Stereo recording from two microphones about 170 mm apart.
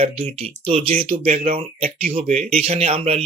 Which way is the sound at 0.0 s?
35° right (ahead or behind).